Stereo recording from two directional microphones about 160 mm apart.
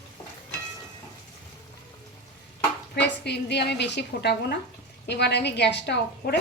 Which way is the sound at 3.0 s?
90° left.